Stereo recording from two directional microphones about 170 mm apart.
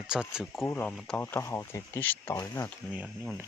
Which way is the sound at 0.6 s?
10° left (ahead or behind).